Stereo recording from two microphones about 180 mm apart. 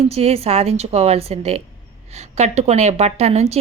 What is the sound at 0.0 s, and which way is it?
A woman's voice, 35° right (ahead or behind).